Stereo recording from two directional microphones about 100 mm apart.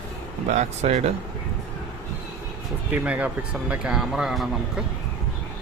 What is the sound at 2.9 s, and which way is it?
Speech, 15° right (ahead or behind).